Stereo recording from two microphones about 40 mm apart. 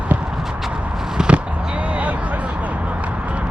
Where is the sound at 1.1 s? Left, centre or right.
Right.